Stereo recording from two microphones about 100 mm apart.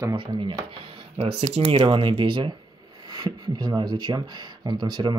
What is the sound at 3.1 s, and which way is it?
Speech, 45° right (ahead or behind).